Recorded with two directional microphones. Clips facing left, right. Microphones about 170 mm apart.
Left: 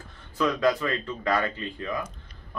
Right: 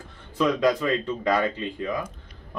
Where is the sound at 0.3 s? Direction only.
15° right (ahead or behind).